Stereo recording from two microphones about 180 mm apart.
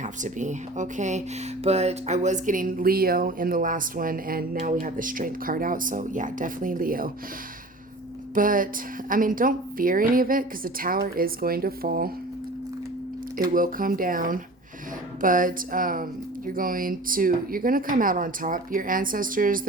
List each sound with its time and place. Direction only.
0.0 s speech: 45° right (ahead or behind)
8.4 s speech: 50° right (ahead or behind)
13.5 s speech: 50° right (ahead or behind)